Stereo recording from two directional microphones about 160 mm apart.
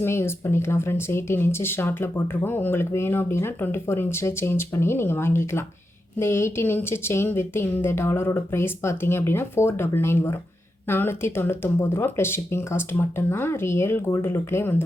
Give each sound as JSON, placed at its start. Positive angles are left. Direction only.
{"t": 0.0, "sound": "speech", "side_deg": 15}